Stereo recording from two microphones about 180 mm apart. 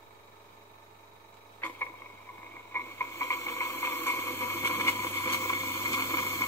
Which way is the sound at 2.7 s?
15° left (ahead or behind).